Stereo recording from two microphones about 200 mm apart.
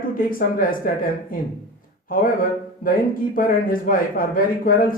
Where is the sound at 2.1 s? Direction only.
45° left (ahead or behind).